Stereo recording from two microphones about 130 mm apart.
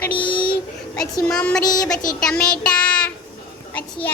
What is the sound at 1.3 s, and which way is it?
Child singing, 5° left (ahead or behind).